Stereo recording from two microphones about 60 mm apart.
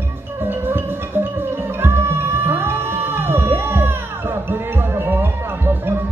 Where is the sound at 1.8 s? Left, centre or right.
Right.